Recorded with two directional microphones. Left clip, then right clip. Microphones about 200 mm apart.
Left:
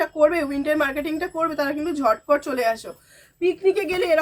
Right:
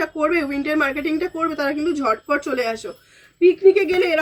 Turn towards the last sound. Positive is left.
turn(degrees=30)  # may be behind; listen again after turning